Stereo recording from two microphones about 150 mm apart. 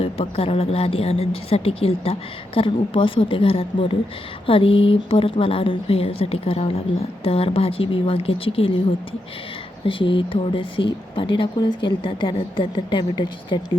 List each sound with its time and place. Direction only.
0.0 s speech: 40° left (ahead or behind)
9.8 s speech: 35° left (ahead or behind)